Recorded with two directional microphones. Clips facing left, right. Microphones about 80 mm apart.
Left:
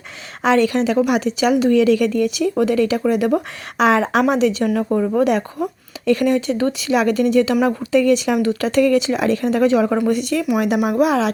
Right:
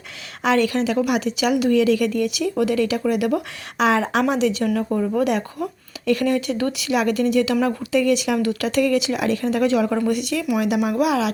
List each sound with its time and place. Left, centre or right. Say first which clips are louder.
0.4 s speech: left 3 dB; left
4.6 s speech: left 3 dB; left
10.1 s speech: left 3 dB; left
10.8 s speech: left 3 dB; left
11.0 s speech: left 4 dB; left